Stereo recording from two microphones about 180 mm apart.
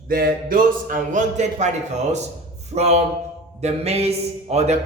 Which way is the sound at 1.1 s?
40° right (ahead or behind).